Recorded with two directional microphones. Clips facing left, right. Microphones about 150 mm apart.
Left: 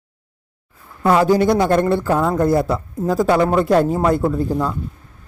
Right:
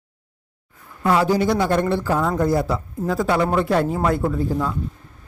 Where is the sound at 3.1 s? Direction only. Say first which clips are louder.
Left 4 dB; 40° left (ahead or behind).